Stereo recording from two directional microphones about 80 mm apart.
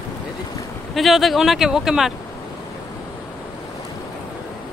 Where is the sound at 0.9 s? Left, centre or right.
Centre.